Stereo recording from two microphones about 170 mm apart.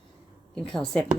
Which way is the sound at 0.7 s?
5° left (ahead or behind).